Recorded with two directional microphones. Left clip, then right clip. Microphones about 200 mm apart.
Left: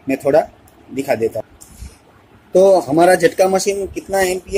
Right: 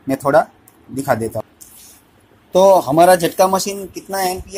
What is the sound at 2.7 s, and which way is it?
Speech, 25° right (ahead or behind).